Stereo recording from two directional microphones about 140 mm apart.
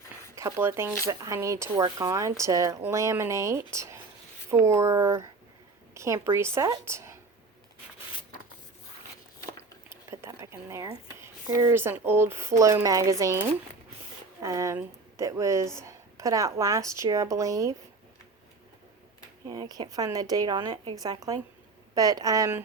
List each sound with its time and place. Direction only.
0.3 s a woman's voice: 20° right (ahead or behind)
9.9 s a sound: 15° right (ahead or behind)
11.4 s speech: 15° right (ahead or behind)
19.5 s speech: 30° right (ahead or behind)